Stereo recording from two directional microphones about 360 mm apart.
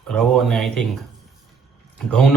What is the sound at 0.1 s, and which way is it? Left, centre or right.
Speech, centre.